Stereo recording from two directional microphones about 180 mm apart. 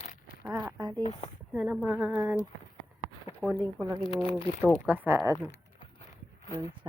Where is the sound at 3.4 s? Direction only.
5° left (ahead or behind).